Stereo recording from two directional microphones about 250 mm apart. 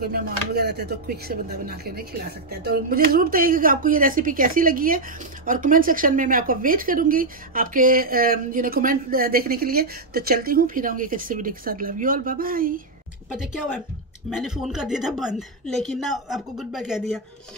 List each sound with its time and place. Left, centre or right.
0.0 s speech: right
14.4 s a woman's voice: centre